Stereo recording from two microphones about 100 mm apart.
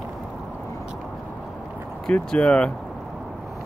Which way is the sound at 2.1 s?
10° left (ahead or behind).